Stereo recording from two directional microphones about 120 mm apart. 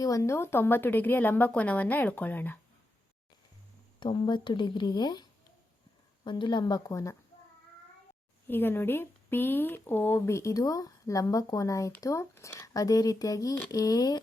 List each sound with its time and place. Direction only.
0.0 s a woman's voice: 25° left (ahead or behind)
4.0 s speech: 40° left (ahead or behind)
8.4 s speech: 15° left (ahead or behind)